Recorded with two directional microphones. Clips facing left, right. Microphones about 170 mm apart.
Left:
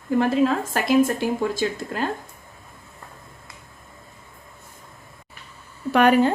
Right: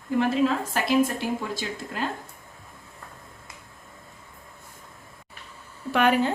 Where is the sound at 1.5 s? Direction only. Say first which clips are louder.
Left 6 dB; 45° left (ahead or behind).